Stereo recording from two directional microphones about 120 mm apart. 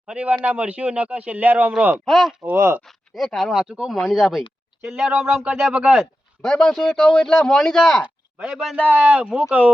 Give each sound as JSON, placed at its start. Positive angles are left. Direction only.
{"t": 0.1, "sound": "speech", "side_deg": -10}
{"t": 2.0, "sound": "speech", "side_deg": 0}
{"t": 2.4, "sound": "speech", "side_deg": -20}
{"t": 2.8, "sound": "speech", "side_deg": 0}
{"t": 6.4, "sound": "speech", "side_deg": 5}
{"t": 8.0, "sound": "speech", "side_deg": -5}